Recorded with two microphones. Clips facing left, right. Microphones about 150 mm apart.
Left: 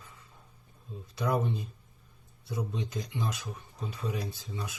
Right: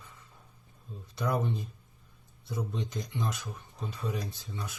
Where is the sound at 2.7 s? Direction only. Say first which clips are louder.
Even; 10° left (ahead or behind).